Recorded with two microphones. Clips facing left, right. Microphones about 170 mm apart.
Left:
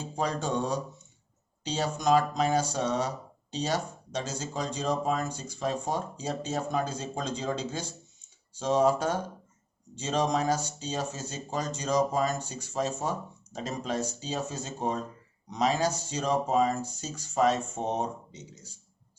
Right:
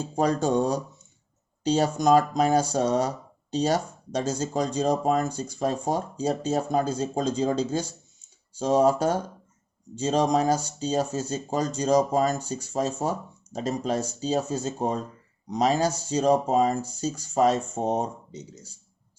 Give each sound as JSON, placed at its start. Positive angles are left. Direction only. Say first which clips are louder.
{"t": 0.2, "sound": "speech", "louder": "right 7 dB", "side_deg": -40}